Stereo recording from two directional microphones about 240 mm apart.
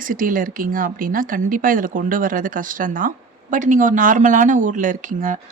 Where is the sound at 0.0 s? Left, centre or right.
Right.